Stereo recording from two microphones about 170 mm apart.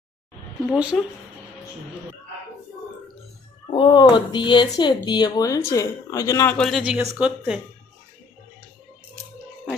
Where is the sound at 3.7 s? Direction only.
25° left (ahead or behind).